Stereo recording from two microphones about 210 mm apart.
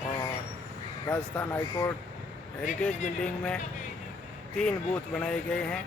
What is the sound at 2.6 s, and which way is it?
Speech, 35° left (ahead or behind).